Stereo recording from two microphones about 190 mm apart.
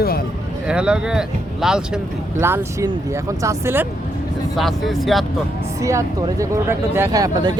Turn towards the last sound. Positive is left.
turn(degrees=-20)  # may be behind; listen again after turning